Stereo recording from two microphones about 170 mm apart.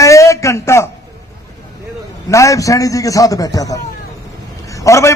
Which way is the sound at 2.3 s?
20° left (ahead or behind).